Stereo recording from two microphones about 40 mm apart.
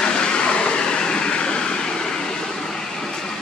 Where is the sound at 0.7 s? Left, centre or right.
Centre.